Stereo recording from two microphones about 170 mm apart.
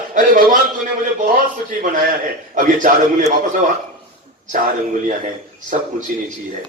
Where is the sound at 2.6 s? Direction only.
50° right (ahead or behind).